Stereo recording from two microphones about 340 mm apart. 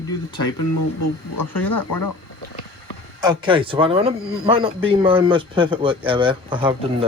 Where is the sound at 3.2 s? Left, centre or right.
Centre.